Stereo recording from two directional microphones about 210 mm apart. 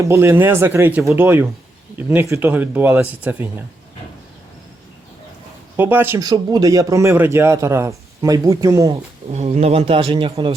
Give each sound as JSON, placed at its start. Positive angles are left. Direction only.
{"t": 0.0, "sound": "a man's voice", "side_deg": -15}
{"t": 5.7, "sound": "a man's voice", "side_deg": -10}
{"t": 8.9, "sound": "speech", "side_deg": -30}